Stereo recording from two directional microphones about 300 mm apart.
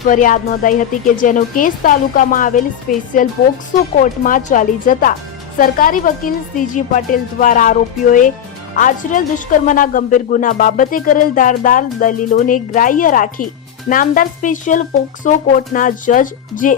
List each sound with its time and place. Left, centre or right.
0.1 s speech: left